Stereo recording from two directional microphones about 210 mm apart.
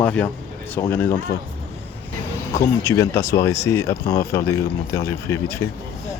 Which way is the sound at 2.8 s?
15° left (ahead or behind).